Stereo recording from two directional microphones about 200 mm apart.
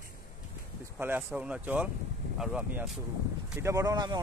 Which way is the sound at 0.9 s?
10° right (ahead or behind).